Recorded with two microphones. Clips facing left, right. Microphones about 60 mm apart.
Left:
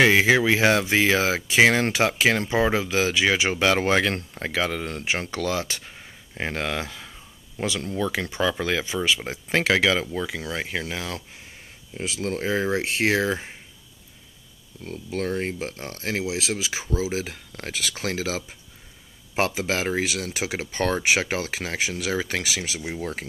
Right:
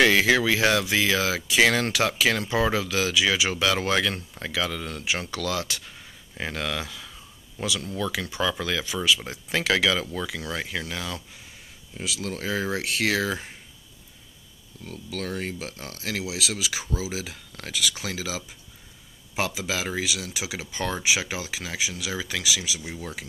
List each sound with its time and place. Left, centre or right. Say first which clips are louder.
0.0 s speech: left 2 dB; left
12.0 s speech: left 4 dB; left
14.8 s speech: left 5 dB; left